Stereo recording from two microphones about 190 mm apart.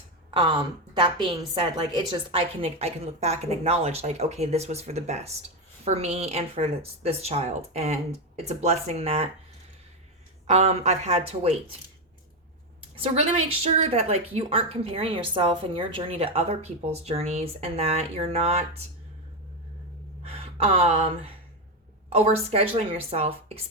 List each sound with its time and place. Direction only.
0.3 s a woman's voice: 25° right (ahead or behind)
10.4 s a woman's voice: 35° right (ahead or behind)
13.0 s a woman's voice: 30° right (ahead or behind)
20.2 s a woman's voice: 30° right (ahead or behind)